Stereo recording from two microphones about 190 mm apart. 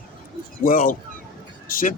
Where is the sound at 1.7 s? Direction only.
45° left (ahead or behind).